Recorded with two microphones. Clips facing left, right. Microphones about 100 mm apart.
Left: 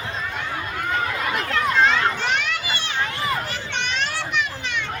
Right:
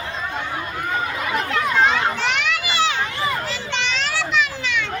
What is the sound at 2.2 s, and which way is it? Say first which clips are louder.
Children playing: right 2 dB; 90° right.